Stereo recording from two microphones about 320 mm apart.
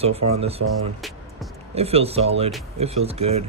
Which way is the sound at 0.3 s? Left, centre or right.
Centre.